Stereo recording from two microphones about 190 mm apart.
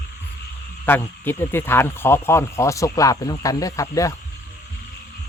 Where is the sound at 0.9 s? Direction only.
10° left (ahead or behind).